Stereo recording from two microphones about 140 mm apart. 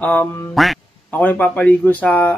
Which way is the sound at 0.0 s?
15° left (ahead or behind).